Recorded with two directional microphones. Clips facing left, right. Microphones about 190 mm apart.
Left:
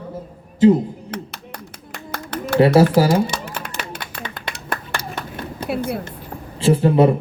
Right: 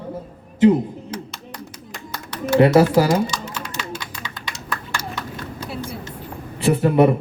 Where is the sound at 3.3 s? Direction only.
60° left (ahead or behind).